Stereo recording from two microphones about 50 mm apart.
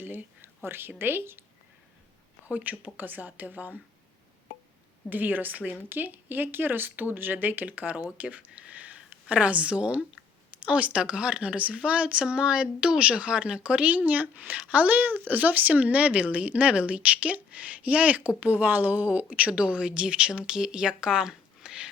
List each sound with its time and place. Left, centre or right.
0.0 s speech: right
2.5 s speech: right
5.0 s speech: right; by 21.8 s centre